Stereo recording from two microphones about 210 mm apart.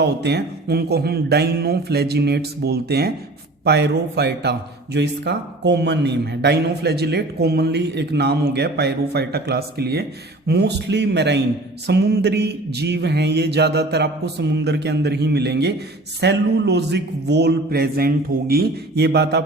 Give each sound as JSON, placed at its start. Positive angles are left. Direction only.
{"t": 0.0, "sound": "speech", "side_deg": -50}